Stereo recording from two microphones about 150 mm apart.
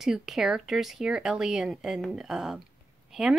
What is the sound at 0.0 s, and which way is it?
Speech, centre (ahead or behind).